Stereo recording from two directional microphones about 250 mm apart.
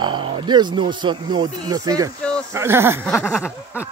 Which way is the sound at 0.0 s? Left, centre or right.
Centre.